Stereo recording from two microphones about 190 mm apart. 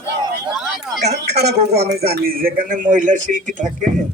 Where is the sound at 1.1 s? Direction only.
60° right (ahead or behind); by 3.6 s 40° right (ahead or behind).